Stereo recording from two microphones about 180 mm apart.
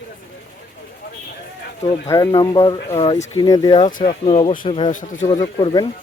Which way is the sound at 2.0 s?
20° left (ahead or behind).